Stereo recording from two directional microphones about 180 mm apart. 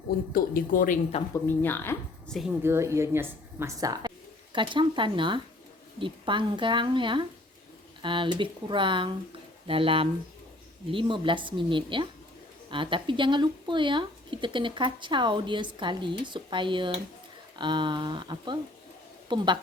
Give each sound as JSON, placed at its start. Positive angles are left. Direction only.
{"t": 0.3, "sound": "speech", "side_deg": 50}
{"t": 1.3, "sound": "speech", "side_deg": 10}
{"t": 2.6, "sound": "speech", "side_deg": -15}